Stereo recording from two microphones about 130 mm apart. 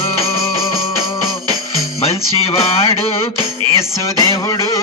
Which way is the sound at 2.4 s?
50° left (ahead or behind).